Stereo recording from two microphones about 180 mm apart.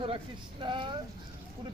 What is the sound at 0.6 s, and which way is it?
Speech, 25° right (ahead or behind).